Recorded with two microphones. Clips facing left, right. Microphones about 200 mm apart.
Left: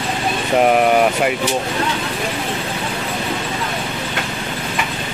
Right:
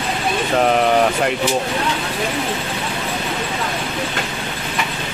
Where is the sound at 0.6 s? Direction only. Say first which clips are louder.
Left 2 dB; 10° left (ahead or behind).